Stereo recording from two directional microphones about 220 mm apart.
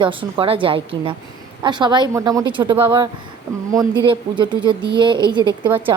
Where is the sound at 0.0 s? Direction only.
25° right (ahead or behind).